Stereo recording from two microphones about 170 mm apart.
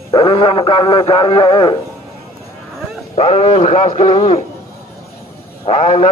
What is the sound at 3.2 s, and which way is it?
A man's voice, 40° left (ahead or behind).